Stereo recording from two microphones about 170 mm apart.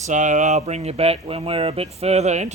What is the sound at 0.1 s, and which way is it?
Speech, 45° right (ahead or behind).